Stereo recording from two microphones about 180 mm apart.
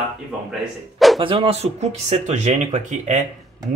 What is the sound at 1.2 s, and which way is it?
Speech, 30° right (ahead or behind).